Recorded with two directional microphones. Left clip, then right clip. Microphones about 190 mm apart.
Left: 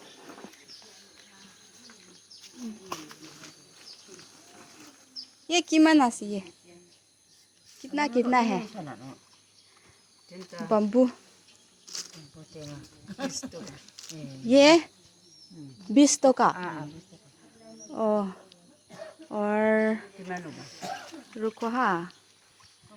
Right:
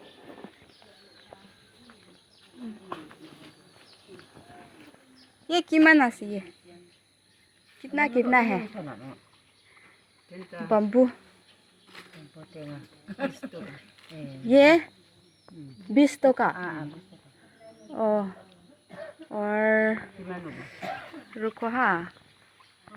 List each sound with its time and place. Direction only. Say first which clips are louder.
5.5 s speech: right 2 dB; 10° left (ahead or behind)
7.8 s a sound: right 2 dB; 20° left (ahead or behind)
8.3 s speech: right 2 dB; 20° left (ahead or behind)
10.3 s speech: right 1 dB; centre (ahead or behind)
10.7 s speech: right 2 dB; 20° left (ahead or behind)
13.1 s speech: right 3 dB; 40° left (ahead or behind)
14.4 s speech: right 1 dB; 20° left (ahead or behind)
16.0 s speech: left 1 dB; 25° left (ahead or behind)
16.6 s speech: right 1 dB; 55° left (ahead or behind)
17.9 s speech: right 1 dB; 20° left (ahead or behind)